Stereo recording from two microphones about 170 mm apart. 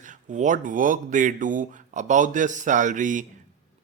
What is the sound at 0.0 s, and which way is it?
A man's voice, 45° right (ahead or behind).